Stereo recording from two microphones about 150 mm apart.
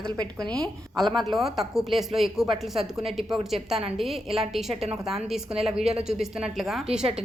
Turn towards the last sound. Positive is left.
turn(degrees=-5)  # may be behind; listen again after turning